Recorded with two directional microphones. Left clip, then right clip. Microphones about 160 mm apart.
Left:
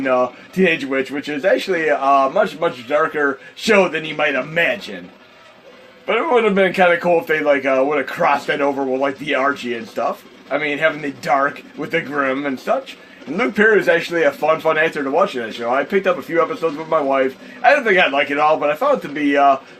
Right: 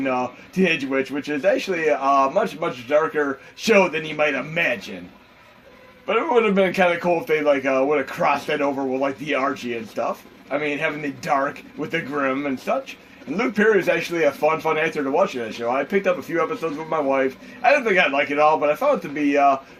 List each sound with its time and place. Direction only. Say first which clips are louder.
0.0 s speech: left 6 dB; 40° left (ahead or behind)
6.1 s speech: left 3 dB; 40° left (ahead or behind)
10.6 s speech: left 6 dB; 40° left (ahead or behind)